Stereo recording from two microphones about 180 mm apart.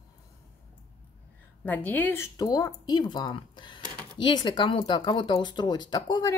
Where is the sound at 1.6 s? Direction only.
10° left (ahead or behind).